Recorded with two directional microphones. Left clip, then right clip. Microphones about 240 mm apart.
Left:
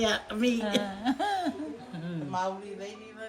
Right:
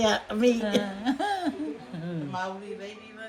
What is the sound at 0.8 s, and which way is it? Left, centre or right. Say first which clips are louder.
Speech: right 1 dB; left.